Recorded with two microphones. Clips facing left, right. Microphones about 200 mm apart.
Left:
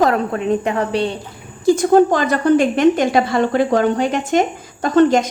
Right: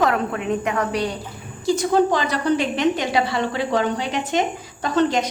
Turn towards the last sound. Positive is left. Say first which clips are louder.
# left 7 dB
turn(degrees=50)  # may be behind; listen again after turning